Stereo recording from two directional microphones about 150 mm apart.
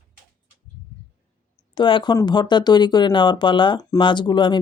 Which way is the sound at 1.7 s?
30° left (ahead or behind).